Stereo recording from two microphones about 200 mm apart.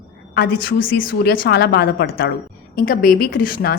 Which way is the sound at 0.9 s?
55° left (ahead or behind).